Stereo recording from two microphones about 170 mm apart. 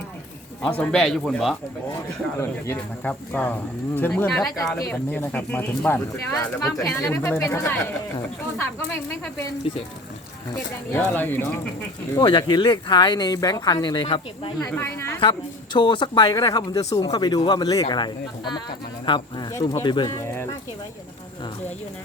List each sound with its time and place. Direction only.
0.8 s speech: 5° left (ahead or behind)
9.7 s speech: 35° left (ahead or behind)
10.9 s speech: 10° left (ahead or behind)
12.1 s speech: 25° left (ahead or behind)
14.7 s speech: 15° left (ahead or behind)
15.2 s speech: 30° left (ahead or behind)